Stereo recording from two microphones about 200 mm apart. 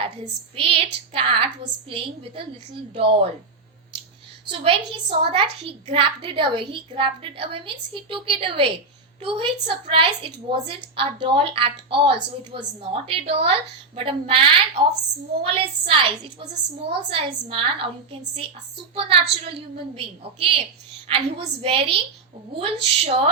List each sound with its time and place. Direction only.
0.5 s a child's voice: 30° right (ahead or behind)
4.4 s a child's voice: 25° right (ahead or behind)